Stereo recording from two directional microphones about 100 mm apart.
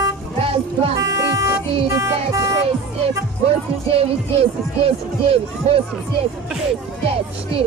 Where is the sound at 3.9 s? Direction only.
80° right.